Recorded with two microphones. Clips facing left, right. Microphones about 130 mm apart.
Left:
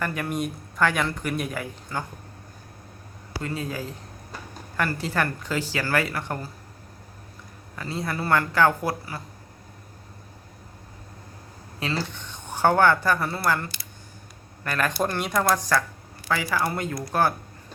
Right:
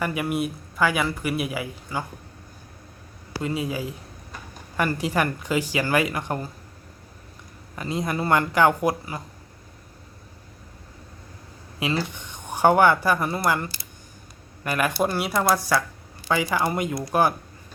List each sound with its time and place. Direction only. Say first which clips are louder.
0.0 s speech: right 2 dB; 10° right (ahead or behind)
3.4 s speech: right 4 dB; 15° right (ahead or behind)
7.8 s speech: right 3 dB; 15° right (ahead or behind)
11.8 s speech: right 3 dB; 15° right (ahead or behind)
16.3 s speech: right 2 dB; 20° right (ahead or behind)